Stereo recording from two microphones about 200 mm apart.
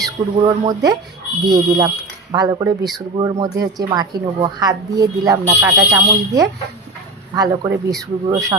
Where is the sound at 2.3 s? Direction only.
20° right (ahead or behind).